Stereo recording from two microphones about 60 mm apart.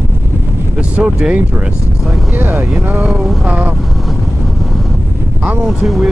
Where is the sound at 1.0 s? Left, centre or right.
Right.